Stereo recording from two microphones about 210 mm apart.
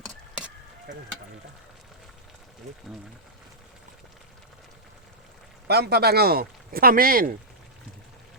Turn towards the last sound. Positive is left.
turn(degrees=-45)  # may be behind; listen again after turning